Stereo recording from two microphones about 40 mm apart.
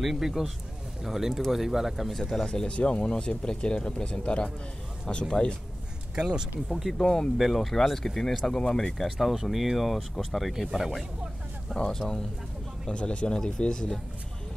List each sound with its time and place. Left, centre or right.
0.0 s speech: centre
2.4 s speech: left
6.1 s speech: right
6.7 s speech: centre
7.0 s speech: centre
7.3 s speech: centre
9.0 s speech: centre
11.7 s speech: centre
12.9 s speech: left